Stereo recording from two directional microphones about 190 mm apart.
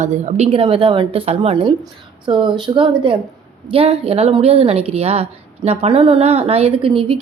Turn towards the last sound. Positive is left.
turn(degrees=-30)  # may be behind; listen again after turning